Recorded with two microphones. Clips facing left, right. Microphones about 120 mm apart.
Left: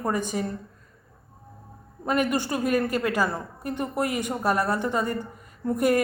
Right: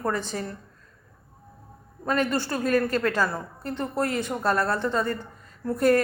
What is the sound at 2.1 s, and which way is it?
A woman's voice, 15° left (ahead or behind).